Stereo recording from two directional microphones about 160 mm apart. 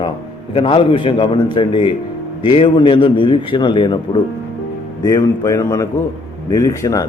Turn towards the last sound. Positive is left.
turn(degrees=20)  # may be behind; listen again after turning